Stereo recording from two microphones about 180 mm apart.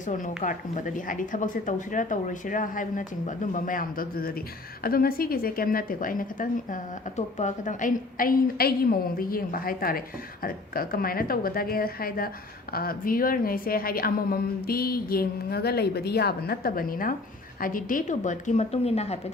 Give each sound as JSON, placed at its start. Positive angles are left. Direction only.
{"t": 0.0, "sound": "a woman's voice", "side_deg": 45}